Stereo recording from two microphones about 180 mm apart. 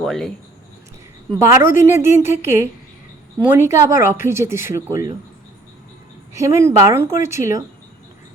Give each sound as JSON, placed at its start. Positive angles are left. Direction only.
{"t": 0.0, "sound": "speech", "side_deg": 0}
{"t": 1.4, "sound": "a woman's voice", "side_deg": -15}
{"t": 6.3, "sound": "a woman's voice", "side_deg": -15}